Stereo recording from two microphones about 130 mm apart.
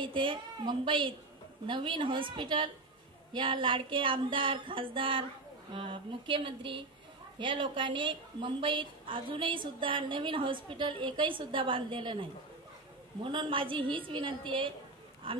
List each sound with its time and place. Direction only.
0.0 s a woman's voice: 40° right (ahead or behind)